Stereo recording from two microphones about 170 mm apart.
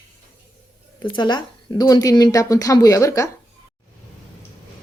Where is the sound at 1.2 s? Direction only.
25° left (ahead or behind).